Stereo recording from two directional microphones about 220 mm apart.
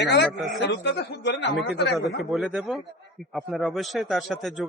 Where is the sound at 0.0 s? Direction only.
50° left (ahead or behind).